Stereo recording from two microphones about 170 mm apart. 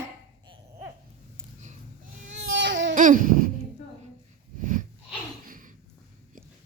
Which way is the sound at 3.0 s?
50° right (ahead or behind).